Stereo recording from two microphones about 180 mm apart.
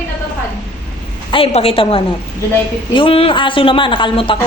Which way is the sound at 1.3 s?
35° left (ahead or behind).